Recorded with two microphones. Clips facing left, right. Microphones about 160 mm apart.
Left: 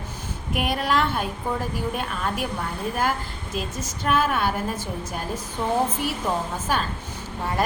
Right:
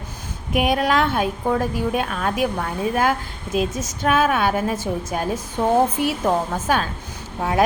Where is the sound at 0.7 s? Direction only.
90° right.